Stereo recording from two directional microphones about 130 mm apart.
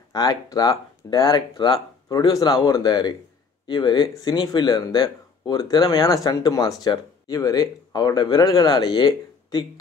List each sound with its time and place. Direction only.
0.1 s speech: 30° left (ahead or behind)